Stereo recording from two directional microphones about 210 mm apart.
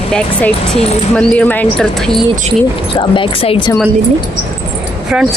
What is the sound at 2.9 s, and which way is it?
Speech, 25° left (ahead or behind).